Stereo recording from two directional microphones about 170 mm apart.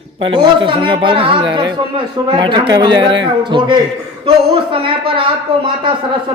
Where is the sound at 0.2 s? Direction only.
30° right (ahead or behind).